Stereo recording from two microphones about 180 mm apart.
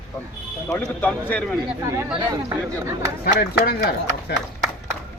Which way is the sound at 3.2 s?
60° left (ahead or behind).